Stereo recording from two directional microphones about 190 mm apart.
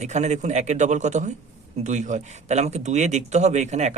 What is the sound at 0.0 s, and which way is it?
A man's voice, 40° right (ahead or behind).